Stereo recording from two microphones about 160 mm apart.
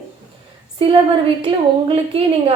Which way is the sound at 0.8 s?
35° right (ahead or behind).